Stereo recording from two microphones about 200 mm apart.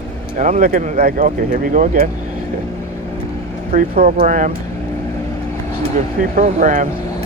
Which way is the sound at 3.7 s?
45° right (ahead or behind).